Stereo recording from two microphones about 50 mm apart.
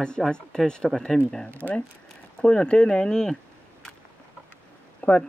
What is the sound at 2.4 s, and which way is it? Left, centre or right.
Speech, centre.